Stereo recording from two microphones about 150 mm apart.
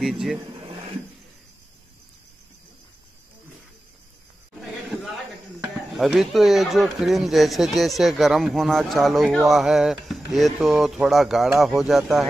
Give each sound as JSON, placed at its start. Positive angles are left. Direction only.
{"t": 0.0, "sound": "speech", "side_deg": 0}
{"t": 5.9, "sound": "speech", "side_deg": 0}